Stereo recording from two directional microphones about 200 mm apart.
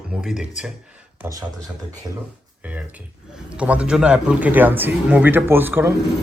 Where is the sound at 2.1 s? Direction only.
20° right (ahead or behind).